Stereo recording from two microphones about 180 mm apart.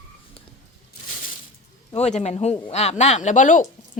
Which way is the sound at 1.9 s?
40° left (ahead or behind).